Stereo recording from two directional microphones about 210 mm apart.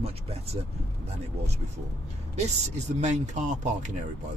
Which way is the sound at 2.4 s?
30° right (ahead or behind).